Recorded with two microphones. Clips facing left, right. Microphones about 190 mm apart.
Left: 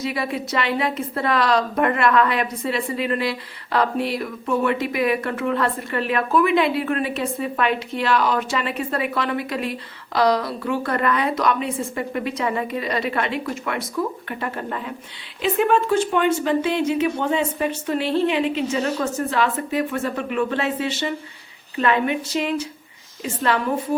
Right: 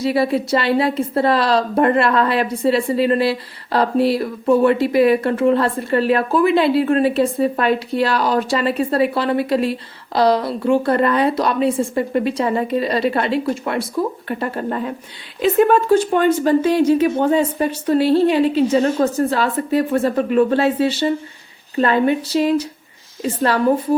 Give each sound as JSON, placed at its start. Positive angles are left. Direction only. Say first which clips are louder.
{"t": 0.0, "sound": "a woman's voice", "louder": "right 8 dB", "side_deg": -35}